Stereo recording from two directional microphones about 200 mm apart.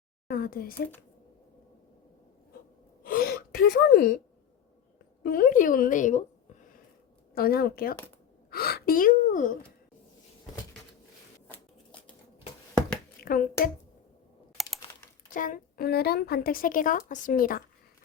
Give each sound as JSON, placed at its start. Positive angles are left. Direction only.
{"t": 0.3, "sound": "speech", "side_deg": 50}
{"t": 3.0, "sound": "gasp", "side_deg": 45}
{"t": 5.2, "sound": "a woman's voice", "side_deg": 45}
{"t": 7.3, "sound": "a woman's voice", "side_deg": 50}
{"t": 11.4, "sound": "shuffling cards", "side_deg": 5}
{"t": 13.2, "sound": "speech", "side_deg": 45}
{"t": 14.6, "sound": "typing", "side_deg": 0}
{"t": 15.3, "sound": "a woman's voice", "side_deg": 40}